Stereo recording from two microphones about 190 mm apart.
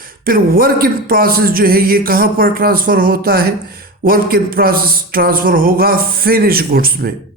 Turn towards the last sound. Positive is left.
turn(degrees=-50)  # may be behind; listen again after turning